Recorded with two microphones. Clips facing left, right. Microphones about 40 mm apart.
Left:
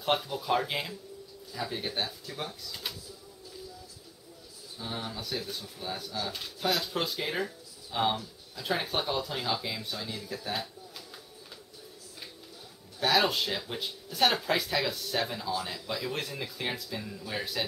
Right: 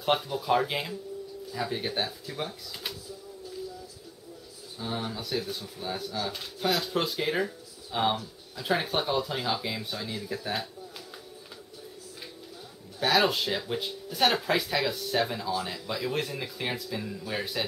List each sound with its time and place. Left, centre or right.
0.0 s speech: centre
4.7 s speech: centre
13.0 s speech: centre